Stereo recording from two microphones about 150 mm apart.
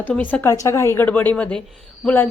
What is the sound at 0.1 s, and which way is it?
A woman's voice, 10° left (ahead or behind).